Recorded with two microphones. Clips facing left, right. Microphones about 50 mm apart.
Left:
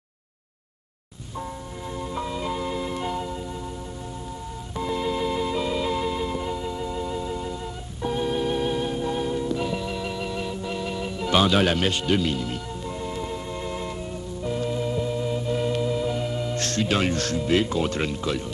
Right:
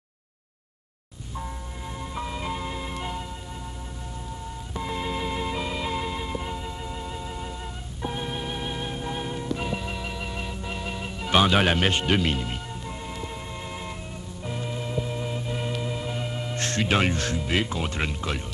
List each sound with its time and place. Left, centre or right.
2.0 s music: centre
4.8 s music: centre
12.8 s music: centre
14.4 s organ: centre
15.8 s speech: centre